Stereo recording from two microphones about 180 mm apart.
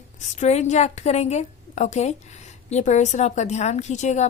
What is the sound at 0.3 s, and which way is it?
A woman's voice, 40° left (ahead or behind).